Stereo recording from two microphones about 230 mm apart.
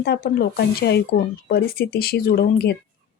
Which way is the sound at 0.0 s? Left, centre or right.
Left.